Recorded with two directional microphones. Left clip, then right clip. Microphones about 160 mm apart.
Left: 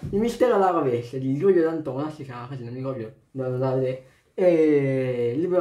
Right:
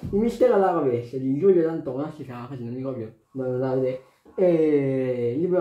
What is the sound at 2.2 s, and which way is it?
Speech, 20° right (ahead or behind).